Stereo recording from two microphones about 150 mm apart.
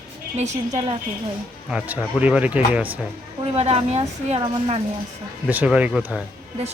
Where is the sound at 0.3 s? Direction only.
50° right (ahead or behind).